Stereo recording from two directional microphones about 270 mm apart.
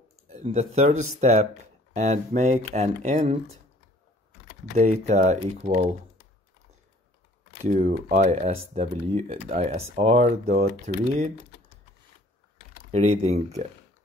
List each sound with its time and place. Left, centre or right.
0.3 s speech: right
4.7 s speech: right
7.6 s speech: right
12.9 s speech: right